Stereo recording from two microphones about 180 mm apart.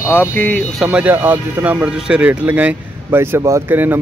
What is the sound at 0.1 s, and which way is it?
Speech, 10° left (ahead or behind).